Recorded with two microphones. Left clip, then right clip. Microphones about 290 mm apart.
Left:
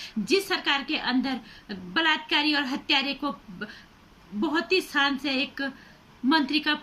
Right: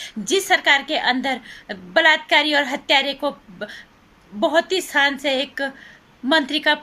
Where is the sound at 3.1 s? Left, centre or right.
Right.